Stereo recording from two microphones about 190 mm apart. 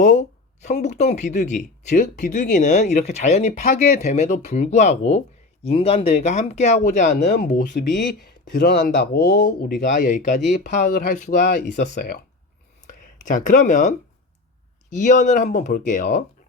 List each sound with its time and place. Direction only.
0.0 s speech: 40° left (ahead or behind)
7.8 s speech: 60° left (ahead or behind)
9.9 s speech: 40° left (ahead or behind)
12.9 s speech: 40° left (ahead or behind)